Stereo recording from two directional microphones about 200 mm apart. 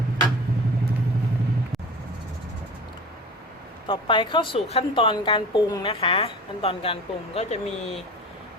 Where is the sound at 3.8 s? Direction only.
25° left (ahead or behind).